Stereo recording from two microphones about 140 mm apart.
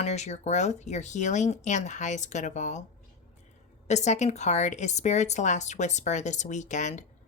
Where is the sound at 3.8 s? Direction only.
55° left (ahead or behind).